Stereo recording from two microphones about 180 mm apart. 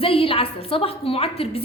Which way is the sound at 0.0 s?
30° left (ahead or behind).